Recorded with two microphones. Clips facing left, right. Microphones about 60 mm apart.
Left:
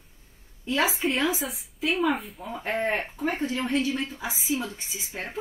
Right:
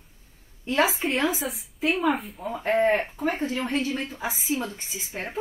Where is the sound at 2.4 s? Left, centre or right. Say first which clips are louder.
Right 6 dB; right.